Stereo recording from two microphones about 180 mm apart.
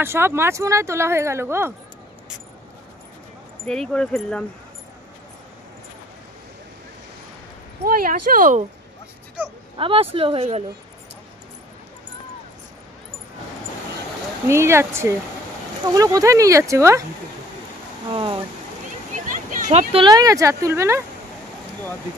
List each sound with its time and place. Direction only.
0.0 s speech: 15° right (ahead or behind)
3.6 s speech: 5° left (ahead or behind)
7.8 s speech: 55° right (ahead or behind)
9.8 s speech: 30° right (ahead or behind)
14.5 s speech: 15° right (ahead or behind)
18.1 s speech: 25° right (ahead or behind)
19.1 s speech: 45° right (ahead or behind); by 21.0 s 15° right (ahead or behind)